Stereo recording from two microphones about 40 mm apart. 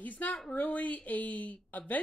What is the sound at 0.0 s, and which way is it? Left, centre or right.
A woman's voice, left.